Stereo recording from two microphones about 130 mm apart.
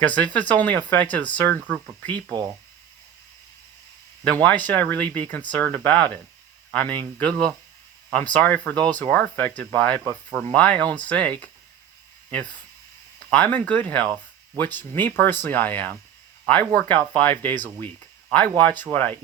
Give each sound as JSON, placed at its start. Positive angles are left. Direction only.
{"t": 0.0, "sound": "speech", "side_deg": 10}
{"t": 4.4, "sound": "speech", "side_deg": 15}
{"t": 10.0, "sound": "speech", "side_deg": -30}
{"t": 10.4, "sound": "speech", "side_deg": 10}
{"t": 13.1, "sound": "speech", "side_deg": 10}